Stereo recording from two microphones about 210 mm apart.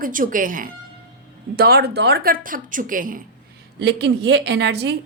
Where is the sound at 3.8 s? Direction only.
55° right (ahead or behind).